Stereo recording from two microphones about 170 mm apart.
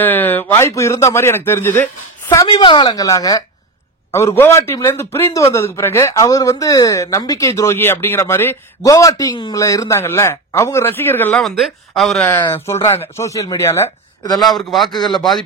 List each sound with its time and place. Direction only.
0.0 s speech: 10° left (ahead or behind)
2.4 s a woman's voice: 30° left (ahead or behind); by 12.3 s centre (ahead or behind)
12.4 s speech: 15° left (ahead or behind)
14.4 s a man's voice: centre (ahead or behind)